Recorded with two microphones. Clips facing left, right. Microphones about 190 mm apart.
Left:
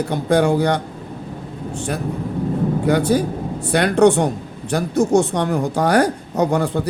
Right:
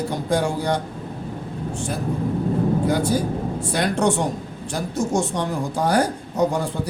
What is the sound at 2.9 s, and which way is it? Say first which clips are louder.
Speech: left 4 dB; 65° left (ahead or behind).